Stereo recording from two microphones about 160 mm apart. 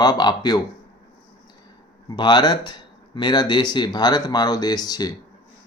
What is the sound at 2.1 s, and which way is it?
Speech, 25° left (ahead or behind).